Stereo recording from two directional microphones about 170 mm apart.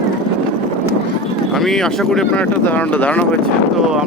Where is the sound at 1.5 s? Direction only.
Centre (ahead or behind).